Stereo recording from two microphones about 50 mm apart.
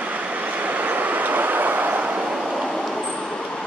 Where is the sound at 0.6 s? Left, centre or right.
Right.